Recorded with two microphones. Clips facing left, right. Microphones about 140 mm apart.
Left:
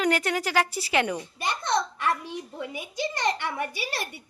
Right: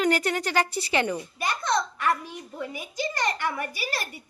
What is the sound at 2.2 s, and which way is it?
A child's voice, 20° left (ahead or behind).